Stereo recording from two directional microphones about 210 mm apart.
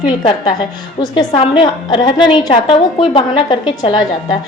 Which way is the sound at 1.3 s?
25° left (ahead or behind).